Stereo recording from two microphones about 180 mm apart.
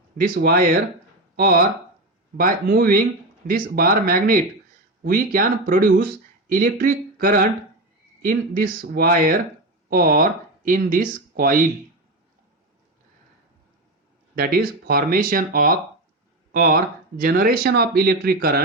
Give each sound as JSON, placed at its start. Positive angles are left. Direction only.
{"t": 0.2, "sound": "speech", "side_deg": -50}
{"t": 14.3, "sound": "speech", "side_deg": -55}